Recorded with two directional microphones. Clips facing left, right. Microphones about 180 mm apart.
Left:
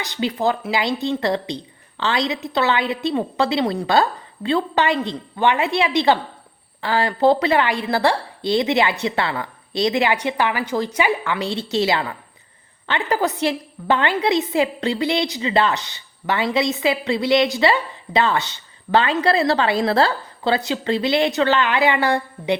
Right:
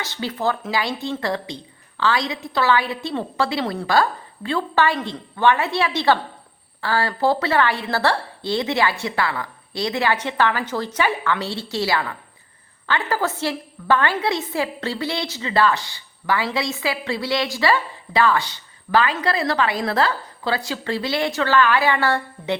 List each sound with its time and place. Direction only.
0.0 s a woman's voice: 15° left (ahead or behind)